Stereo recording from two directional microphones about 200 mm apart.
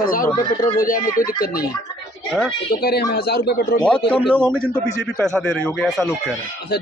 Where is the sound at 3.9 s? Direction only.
25° left (ahead or behind).